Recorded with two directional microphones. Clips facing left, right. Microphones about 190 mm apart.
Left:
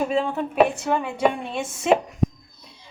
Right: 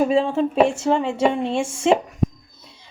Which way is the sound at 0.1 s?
25° right (ahead or behind).